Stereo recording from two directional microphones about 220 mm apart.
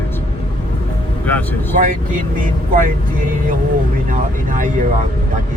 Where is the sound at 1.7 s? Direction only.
35° right (ahead or behind).